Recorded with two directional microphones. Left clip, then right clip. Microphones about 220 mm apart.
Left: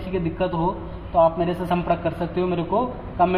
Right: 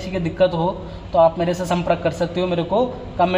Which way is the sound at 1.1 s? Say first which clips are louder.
Right 3 dB; 30° right (ahead or behind).